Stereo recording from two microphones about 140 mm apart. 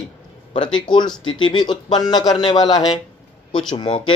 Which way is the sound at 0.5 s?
35° left (ahead or behind).